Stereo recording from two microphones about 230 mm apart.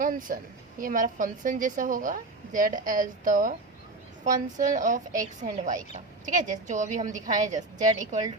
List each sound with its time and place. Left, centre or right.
0.0 s a woman's voice: right
4.6 s a woman's voice: right